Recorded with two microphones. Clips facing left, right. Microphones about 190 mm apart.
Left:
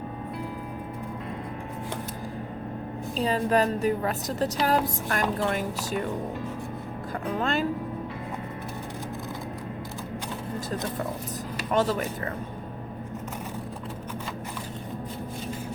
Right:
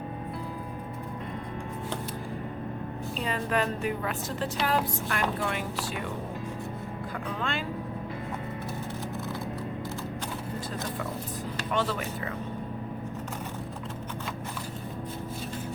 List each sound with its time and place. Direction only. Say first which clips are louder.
3.2 s a woman's voice: left 6 dB; 35° left (ahead or behind)
7.3 s a woman's voice: left 8 dB; 40° left (ahead or behind)
11.7 s a woman's voice: left 5 dB; 40° left (ahead or behind)